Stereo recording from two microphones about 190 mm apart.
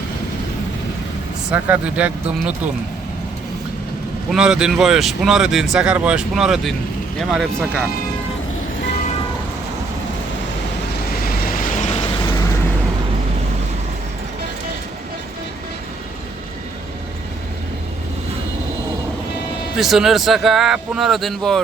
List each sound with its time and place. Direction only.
1.5 s speech: 10° right (ahead or behind)
4.3 s speech: 5° right (ahead or behind)
11.1 s vehicle: 50° left (ahead or behind); by 12.5 s 20° left (ahead or behind)
19.7 s speech: centre (ahead or behind)